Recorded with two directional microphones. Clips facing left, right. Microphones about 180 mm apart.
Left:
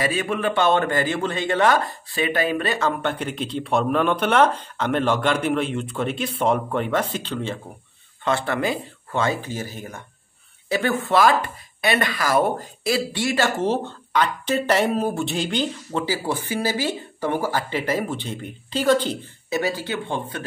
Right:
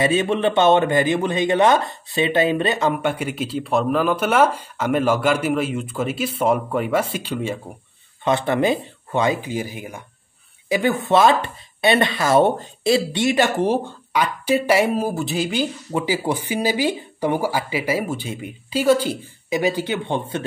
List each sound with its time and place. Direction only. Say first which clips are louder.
0.0 s speech: right 5 dB; 25° right (ahead or behind)
3.0 s speech: right 3 dB; 10° right (ahead or behind)